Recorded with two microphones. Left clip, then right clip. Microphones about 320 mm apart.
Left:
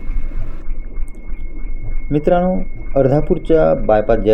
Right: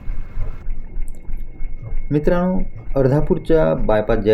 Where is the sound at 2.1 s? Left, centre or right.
Centre.